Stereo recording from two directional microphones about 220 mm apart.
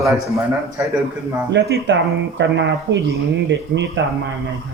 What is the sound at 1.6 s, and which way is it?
Speech, 55° right (ahead or behind).